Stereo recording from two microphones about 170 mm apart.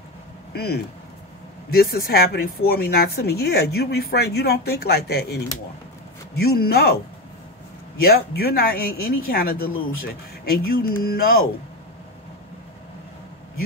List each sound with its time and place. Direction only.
0.5 s speech: 70° left (ahead or behind)
8.0 s speech: 65° left (ahead or behind)